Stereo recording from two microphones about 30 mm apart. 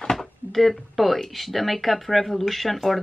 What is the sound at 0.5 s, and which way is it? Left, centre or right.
Speech, centre.